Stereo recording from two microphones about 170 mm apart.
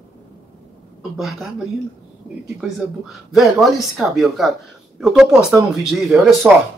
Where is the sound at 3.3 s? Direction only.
Centre (ahead or behind).